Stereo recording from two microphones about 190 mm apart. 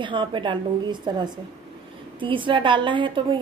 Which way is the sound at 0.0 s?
25° right (ahead or behind).